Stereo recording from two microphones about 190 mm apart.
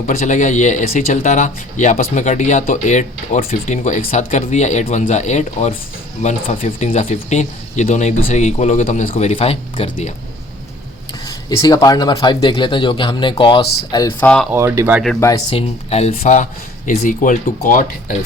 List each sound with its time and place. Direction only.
0.1 s speech: 40° left (ahead or behind)
11.3 s speech: 20° left (ahead or behind)
14.2 s speech: 5° left (ahead or behind)
14.5 s speech: 15° right (ahead or behind)
15.2 s speech: 20° left (ahead or behind); by 17.8 s 45° left (ahead or behind)